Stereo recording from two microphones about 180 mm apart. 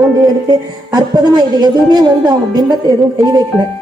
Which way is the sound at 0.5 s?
20° right (ahead or behind).